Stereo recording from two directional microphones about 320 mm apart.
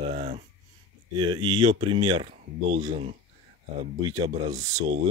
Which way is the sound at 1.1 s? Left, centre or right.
Centre.